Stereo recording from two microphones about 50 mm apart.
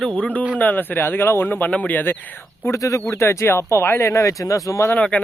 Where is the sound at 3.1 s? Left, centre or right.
Left.